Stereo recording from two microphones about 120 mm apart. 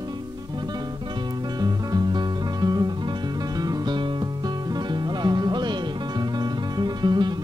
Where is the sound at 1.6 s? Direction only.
35° right (ahead or behind).